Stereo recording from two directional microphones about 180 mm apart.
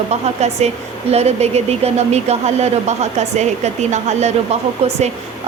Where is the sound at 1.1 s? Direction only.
35° right (ahead or behind).